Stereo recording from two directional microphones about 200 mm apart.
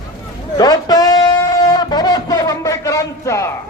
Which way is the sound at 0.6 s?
20° left (ahead or behind).